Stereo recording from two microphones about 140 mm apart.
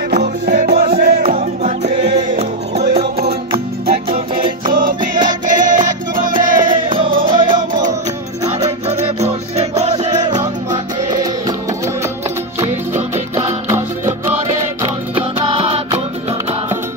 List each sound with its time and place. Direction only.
0.6 s music: 70° right (ahead or behind)
1.3 s music: 60° right (ahead or behind)
3.2 s music: 90° right; by 5.9 s 70° right (ahead or behind)
6.3 s music: 35° right (ahead or behind)
8.5 s music: 50° right (ahead or behind)
10.4 s music: 30° right (ahead or behind)
13.4 s music: 20° right (ahead or behind)
14.8 s music: 40° right (ahead or behind)